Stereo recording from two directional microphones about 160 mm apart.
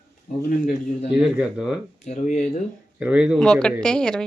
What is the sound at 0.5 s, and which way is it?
Speech, 55° left (ahead or behind).